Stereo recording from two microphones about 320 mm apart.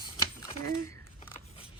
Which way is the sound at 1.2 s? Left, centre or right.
Centre.